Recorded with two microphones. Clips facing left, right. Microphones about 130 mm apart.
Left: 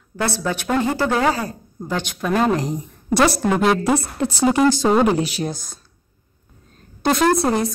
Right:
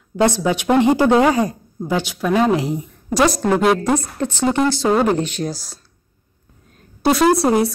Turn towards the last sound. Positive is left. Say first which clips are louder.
# right 3 dB
turn(degrees=-5)  # may be behind; listen again after turning